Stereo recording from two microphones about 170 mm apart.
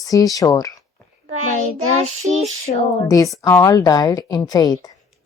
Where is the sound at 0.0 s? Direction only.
20° left (ahead or behind).